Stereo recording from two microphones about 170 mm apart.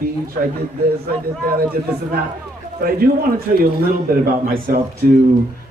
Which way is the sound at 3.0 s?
60° right (ahead or behind).